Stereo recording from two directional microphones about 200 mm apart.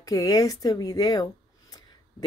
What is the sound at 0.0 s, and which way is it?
A woman's voice, 20° left (ahead or behind).